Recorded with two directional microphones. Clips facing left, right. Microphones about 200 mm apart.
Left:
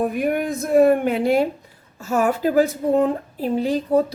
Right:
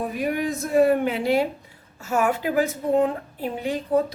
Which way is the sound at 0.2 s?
55° left (ahead or behind).